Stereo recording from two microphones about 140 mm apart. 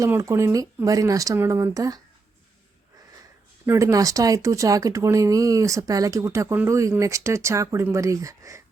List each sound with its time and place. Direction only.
0.0 s speech: 20° right (ahead or behind)
3.7 s speech: 20° right (ahead or behind)